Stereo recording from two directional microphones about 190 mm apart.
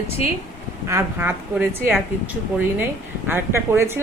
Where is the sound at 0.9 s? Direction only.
15° right (ahead or behind).